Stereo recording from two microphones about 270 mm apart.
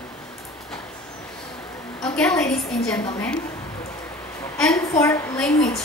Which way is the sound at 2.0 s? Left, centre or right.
Centre.